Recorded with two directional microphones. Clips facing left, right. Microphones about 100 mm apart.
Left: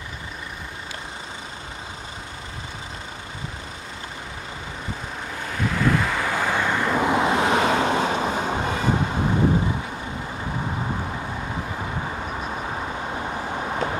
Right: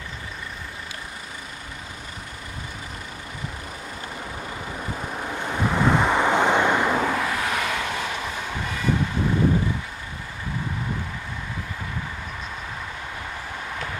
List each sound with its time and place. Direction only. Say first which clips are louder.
5.5 s vehicle: right 1 dB; 20° right (ahead or behind)
7.0 s vehicle: left 4 dB; 20° left (ahead or behind)
12.3 s vehicle: left 5 dB; 40° left (ahead or behind)